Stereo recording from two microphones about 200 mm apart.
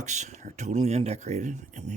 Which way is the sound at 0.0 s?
35° right (ahead or behind).